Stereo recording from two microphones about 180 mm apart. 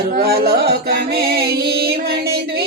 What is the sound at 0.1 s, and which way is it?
Music, 60° right (ahead or behind).